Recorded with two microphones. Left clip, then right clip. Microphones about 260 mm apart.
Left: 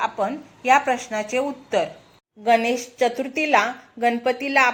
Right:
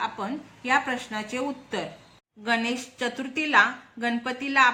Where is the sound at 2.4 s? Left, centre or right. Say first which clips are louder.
Left 8 dB; centre.